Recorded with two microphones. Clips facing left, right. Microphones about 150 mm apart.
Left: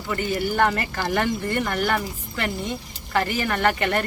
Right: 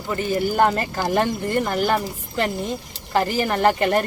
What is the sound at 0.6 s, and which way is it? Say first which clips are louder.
Speech: right 3 dB; 30° right (ahead or behind).